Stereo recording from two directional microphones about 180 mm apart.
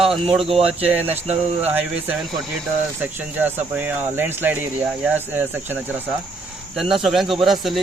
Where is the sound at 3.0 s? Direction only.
10° right (ahead or behind).